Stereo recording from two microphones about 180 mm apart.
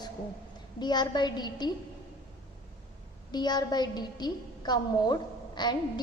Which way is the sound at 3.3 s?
25° left (ahead or behind).